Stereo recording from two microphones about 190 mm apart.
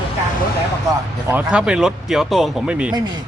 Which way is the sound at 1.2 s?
5° right (ahead or behind).